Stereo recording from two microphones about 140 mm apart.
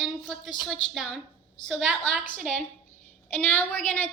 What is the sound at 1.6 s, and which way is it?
Speech, centre (ahead or behind).